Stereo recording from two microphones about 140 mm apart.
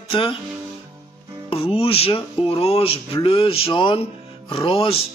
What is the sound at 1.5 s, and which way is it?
Music, 40° left (ahead or behind).